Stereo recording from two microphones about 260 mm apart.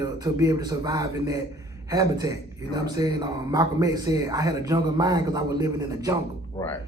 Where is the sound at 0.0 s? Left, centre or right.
Centre.